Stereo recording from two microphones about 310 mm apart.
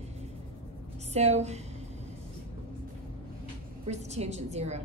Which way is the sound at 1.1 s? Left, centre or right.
Right.